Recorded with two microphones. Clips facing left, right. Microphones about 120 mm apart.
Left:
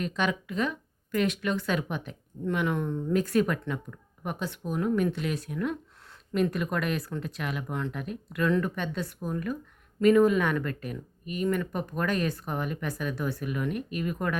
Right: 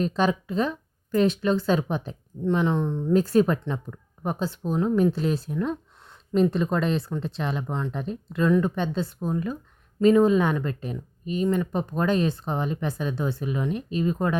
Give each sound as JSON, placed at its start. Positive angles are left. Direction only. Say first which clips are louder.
{"t": 0.0, "sound": "speech", "louder": "right 6 dB", "side_deg": -35}